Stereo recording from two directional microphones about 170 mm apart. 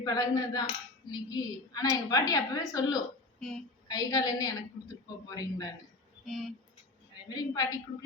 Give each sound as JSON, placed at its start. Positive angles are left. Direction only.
{"t": 0.0, "sound": "cutlery", "side_deg": 20}
{"t": 6.2, "sound": "speech", "side_deg": 0}
{"t": 7.3, "sound": "cutlery", "side_deg": 25}